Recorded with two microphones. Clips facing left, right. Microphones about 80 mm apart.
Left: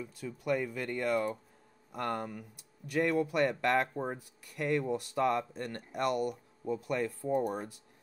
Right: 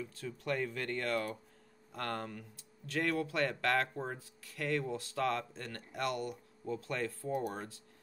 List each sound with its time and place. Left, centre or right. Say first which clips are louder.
0.0 s speech: left 3 dB; centre